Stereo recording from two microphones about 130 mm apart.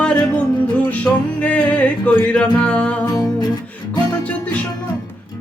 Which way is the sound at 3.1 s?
25° left (ahead or behind).